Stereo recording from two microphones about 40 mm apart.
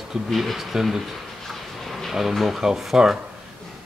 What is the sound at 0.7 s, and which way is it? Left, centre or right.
Speech, centre.